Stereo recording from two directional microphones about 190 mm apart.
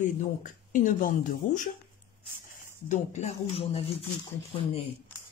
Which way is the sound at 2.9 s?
40° left (ahead or behind).